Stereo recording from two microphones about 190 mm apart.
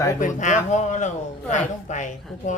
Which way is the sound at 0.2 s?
40° left (ahead or behind).